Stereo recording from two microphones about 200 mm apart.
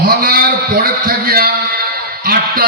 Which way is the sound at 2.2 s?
50° right (ahead or behind).